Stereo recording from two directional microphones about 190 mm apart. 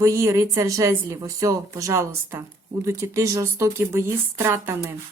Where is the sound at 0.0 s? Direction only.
15° right (ahead or behind).